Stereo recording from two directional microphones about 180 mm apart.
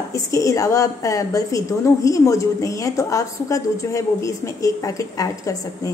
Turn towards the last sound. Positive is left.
turn(degrees=20)  # may be behind; listen again after turning